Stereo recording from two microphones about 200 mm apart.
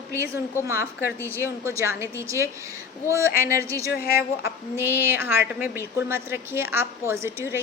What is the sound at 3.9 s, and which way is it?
Speech, 50° left (ahead or behind).